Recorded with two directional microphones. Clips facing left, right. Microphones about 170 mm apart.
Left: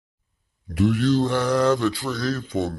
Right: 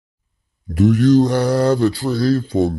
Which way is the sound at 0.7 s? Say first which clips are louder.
Right 7 dB; 45° right (ahead or behind).